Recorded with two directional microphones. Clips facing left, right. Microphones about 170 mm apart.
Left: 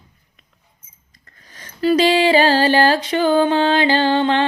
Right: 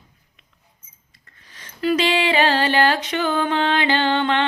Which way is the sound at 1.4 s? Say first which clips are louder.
Left 4 dB; 45° left (ahead or behind).